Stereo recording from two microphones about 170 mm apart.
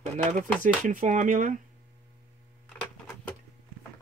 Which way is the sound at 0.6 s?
50° right (ahead or behind).